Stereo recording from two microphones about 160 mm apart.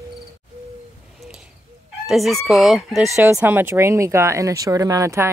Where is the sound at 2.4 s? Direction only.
Centre (ahead or behind).